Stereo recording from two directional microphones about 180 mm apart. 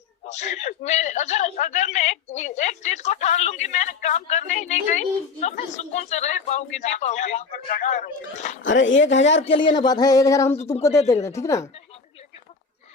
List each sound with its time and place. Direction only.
0.3 s a man's voice: 40° left (ahead or behind)
8.6 s speech: 90° left
9.4 s speech: 30° left (ahead or behind)